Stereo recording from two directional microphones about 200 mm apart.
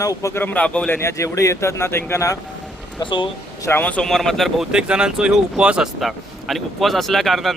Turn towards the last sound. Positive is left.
turn(degrees=0)  # may be behind; listen again after turning